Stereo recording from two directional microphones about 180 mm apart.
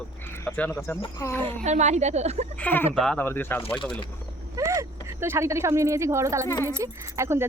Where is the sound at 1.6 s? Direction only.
40° right (ahead or behind).